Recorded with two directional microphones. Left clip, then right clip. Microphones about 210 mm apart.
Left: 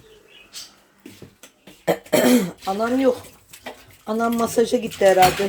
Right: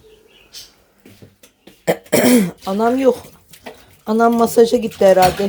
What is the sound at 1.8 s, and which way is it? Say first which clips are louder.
Throat clearing: right 3 dB; 20° right (ahead or behind).